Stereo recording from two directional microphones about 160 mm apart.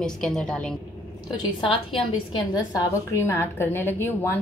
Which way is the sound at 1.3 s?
35° left (ahead or behind).